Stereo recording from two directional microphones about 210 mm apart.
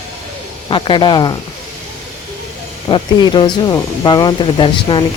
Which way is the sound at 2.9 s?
20° left (ahead or behind).